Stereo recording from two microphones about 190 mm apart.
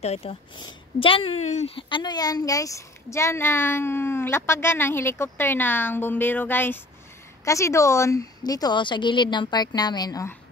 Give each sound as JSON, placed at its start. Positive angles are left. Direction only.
{"t": 0.0, "sound": "a woman's voice", "side_deg": 30}